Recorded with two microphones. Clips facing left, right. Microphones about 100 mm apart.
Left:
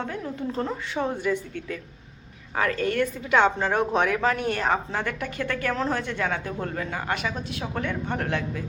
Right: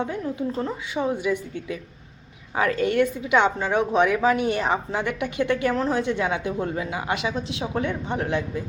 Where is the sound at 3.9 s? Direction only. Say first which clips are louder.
Right 3 dB; 10° right (ahead or behind).